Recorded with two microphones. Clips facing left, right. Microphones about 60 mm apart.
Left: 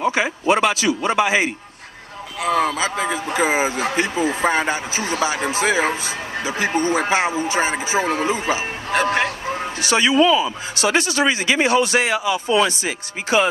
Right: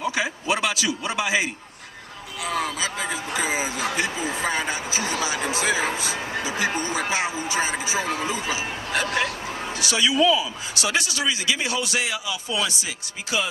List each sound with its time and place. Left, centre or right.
0.0 s speech: left